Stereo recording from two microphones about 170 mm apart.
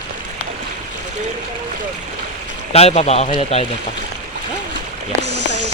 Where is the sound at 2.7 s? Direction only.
40° left (ahead or behind).